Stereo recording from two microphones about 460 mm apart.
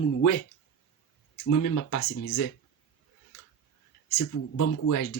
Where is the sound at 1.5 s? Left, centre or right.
Left.